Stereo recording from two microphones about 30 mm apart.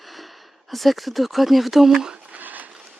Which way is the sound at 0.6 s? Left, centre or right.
Centre.